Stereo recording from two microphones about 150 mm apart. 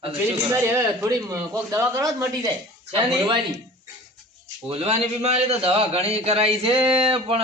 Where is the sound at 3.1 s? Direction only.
35° right (ahead or behind).